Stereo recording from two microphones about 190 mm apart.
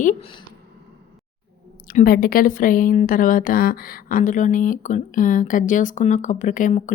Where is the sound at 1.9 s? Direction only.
50° left (ahead or behind).